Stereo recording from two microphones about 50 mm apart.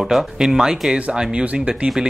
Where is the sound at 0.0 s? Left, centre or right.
Centre.